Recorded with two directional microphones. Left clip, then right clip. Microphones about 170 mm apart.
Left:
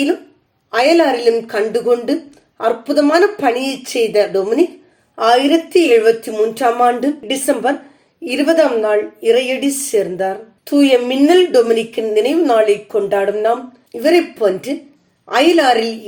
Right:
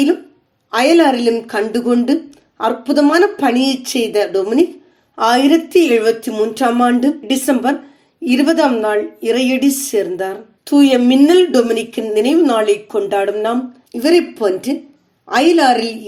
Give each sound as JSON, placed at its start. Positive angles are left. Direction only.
{"t": 0.7, "sound": "a woman's voice", "side_deg": -25}